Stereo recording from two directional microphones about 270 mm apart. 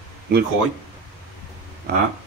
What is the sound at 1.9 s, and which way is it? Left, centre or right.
Speech, right.